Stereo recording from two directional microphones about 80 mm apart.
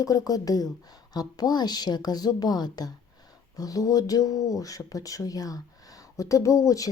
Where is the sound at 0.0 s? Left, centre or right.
Left.